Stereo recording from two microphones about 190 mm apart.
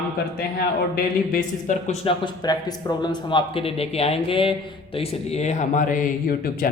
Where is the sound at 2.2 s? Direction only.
20° left (ahead or behind); by 6.7 s 50° left (ahead or behind).